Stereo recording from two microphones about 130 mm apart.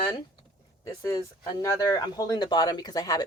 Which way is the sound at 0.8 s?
25° left (ahead or behind).